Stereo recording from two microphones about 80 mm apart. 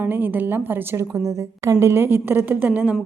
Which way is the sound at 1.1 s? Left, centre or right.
Right.